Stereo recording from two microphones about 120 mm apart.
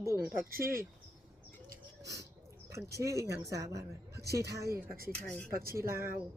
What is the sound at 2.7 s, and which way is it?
Speech, 25° right (ahead or behind).